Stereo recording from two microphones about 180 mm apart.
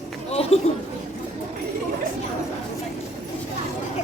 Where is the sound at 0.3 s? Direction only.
35° left (ahead or behind).